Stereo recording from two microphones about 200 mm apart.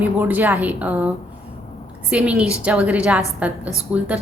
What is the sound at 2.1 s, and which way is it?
A woman's voice, 5° right (ahead or behind).